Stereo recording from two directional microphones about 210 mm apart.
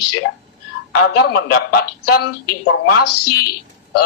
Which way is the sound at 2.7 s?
90° left.